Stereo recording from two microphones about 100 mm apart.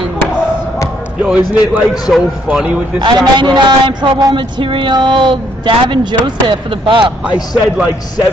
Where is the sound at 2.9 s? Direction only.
50° right (ahead or behind).